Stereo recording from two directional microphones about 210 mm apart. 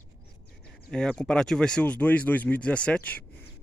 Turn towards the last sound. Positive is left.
turn(degrees=5)  # may be behind; listen again after turning